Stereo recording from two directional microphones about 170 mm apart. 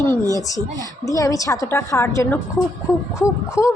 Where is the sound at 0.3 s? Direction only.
20° left (ahead or behind).